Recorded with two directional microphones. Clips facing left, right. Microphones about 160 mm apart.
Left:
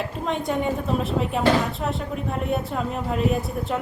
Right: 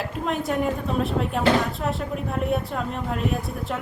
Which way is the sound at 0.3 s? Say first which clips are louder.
Even; centre (ahead or behind).